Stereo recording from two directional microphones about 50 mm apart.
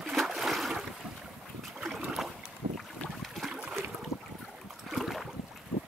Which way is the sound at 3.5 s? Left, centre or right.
Right.